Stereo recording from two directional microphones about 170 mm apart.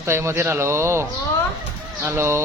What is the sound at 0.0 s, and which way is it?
Speech, 15° right (ahead or behind).